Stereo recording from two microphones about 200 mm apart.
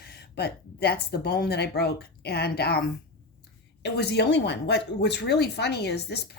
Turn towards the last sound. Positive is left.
turn(degrees=55)  # may be behind; listen again after turning